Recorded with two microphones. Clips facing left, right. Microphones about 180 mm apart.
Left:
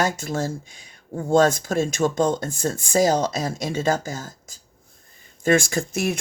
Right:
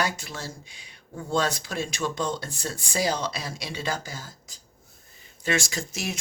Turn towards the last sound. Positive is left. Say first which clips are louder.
# left 9 dB
turn(degrees=55)  # may be behind; listen again after turning